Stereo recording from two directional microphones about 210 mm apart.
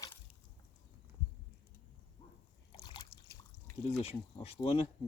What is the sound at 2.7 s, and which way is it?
Liquid, 20° left (ahead or behind).